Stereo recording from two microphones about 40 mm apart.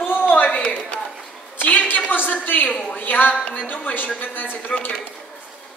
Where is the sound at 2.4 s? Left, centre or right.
Left.